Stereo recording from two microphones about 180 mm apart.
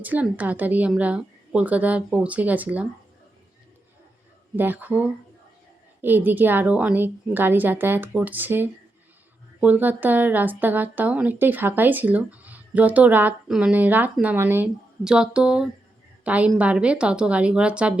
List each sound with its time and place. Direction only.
0.0 s speech: 10° right (ahead or behind)
4.5 s speech: 10° right (ahead or behind)